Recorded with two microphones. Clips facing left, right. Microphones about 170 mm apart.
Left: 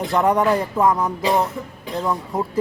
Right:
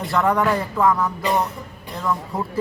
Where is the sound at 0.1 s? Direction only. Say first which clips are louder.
Left 2 dB; 20° left (ahead or behind).